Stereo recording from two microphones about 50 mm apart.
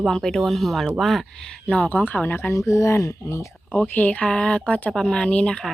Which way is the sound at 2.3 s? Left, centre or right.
Left.